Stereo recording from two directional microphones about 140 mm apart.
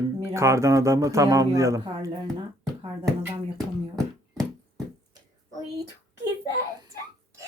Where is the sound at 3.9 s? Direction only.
5° left (ahead or behind).